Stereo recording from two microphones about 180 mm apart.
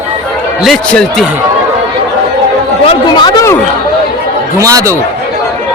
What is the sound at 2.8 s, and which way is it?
Speech, 30° left (ahead or behind).